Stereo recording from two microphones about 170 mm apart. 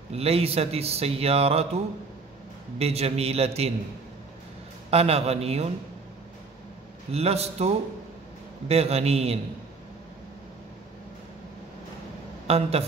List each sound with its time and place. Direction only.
0.1 s speech: 35° right (ahead or behind)
2.8 s speech: 35° right (ahead or behind)
4.9 s speech: 35° right (ahead or behind)
7.1 s speech: 35° right (ahead or behind)
12.4 s a man's voice: 35° right (ahead or behind)